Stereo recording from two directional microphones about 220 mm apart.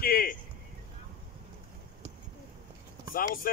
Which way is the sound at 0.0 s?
40° left (ahead or behind).